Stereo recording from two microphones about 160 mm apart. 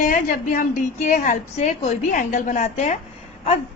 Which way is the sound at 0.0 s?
55° left (ahead or behind).